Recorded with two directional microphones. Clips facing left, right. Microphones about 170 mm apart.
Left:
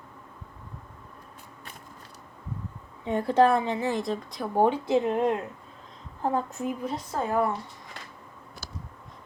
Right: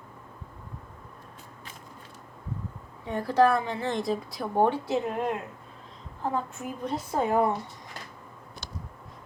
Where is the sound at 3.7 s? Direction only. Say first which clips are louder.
Left 2 dB; 10° left (ahead or behind).